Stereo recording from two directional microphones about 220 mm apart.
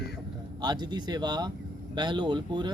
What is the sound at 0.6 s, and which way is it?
A man's voice, 20° right (ahead or behind).